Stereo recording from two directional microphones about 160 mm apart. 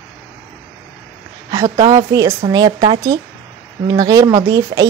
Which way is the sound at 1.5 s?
20° right (ahead or behind).